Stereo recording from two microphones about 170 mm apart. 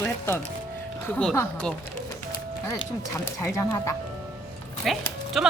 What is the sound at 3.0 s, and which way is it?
Speech, 15° left (ahead or behind).